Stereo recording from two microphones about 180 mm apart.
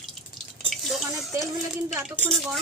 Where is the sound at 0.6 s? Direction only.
Centre (ahead or behind).